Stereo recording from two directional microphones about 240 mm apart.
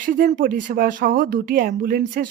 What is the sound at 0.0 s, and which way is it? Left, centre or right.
Speech, right.